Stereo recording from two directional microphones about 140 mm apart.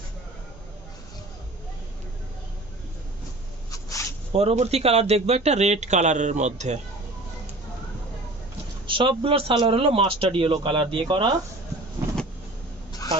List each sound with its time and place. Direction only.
3.7 s cat: 25° left (ahead or behind)
4.3 s speech: 45° right (ahead or behind)
8.9 s speech: 35° right (ahead or behind)